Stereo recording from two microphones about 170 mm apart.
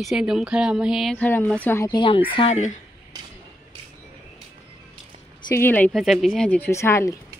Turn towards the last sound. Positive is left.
turn(degrees=15)  # may be behind; listen again after turning